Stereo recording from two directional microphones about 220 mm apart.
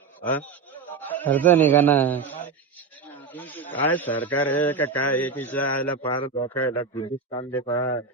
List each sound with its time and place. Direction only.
0.2 s a man's voice: 10° left (ahead or behind)
6.9 s speech: 20° left (ahead or behind)
7.5 s a man's voice: 10° left (ahead or behind)